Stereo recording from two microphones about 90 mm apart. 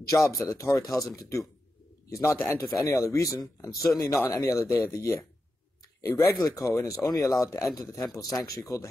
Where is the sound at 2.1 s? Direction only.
35° left (ahead or behind).